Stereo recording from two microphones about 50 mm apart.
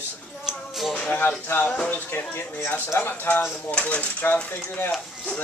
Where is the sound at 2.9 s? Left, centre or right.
Left.